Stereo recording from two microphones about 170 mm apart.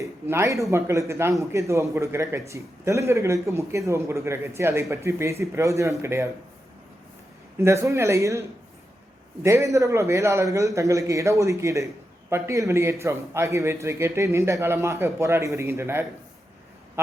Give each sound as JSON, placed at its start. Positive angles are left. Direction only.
{"t": 0.0, "sound": "a man's voice", "side_deg": -15}
{"t": 7.6, "sound": "a man's voice", "side_deg": -15}